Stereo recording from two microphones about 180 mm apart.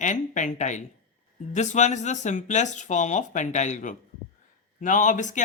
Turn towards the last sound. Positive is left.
turn(degrees=45)  # may be behind; listen again after turning